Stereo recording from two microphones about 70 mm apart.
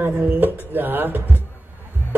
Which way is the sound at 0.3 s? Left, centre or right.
Right.